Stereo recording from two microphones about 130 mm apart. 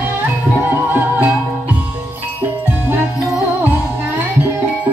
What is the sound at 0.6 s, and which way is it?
Music, 15° right (ahead or behind).